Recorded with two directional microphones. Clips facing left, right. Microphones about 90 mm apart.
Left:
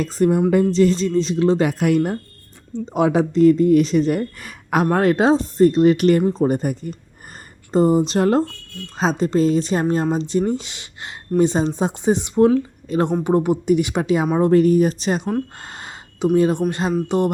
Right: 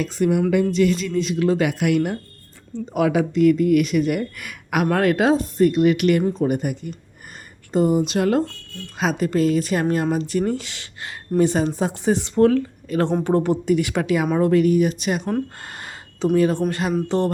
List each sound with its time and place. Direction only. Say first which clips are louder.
0.0 s speech: left 2 dB; 40° left (ahead or behind)
2.7 s speech: left 2 dB; 25° left (ahead or behind)
14.5 s speech: left 4 dB; 35° left (ahead or behind)
15.6 s speech: left 1 dB; 20° left (ahead or behind)
17.1 s music: left 2 dB; 15° left (ahead or behind)